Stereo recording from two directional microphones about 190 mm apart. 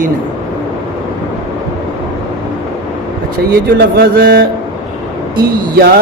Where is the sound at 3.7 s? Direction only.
50° right (ahead or behind).